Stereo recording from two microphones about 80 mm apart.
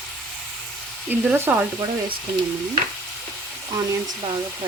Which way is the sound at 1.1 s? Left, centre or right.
Right.